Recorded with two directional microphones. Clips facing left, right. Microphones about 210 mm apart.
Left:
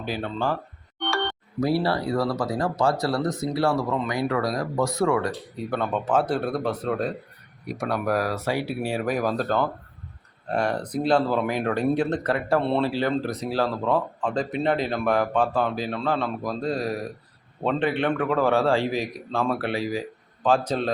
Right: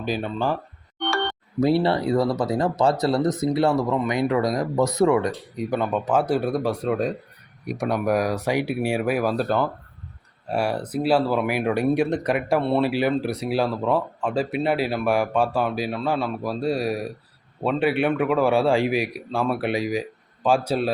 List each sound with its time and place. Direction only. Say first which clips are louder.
0.0 s speech: right 2 dB; 15° right (ahead or behind)
1.6 s speech: right 3 dB; 25° right (ahead or behind)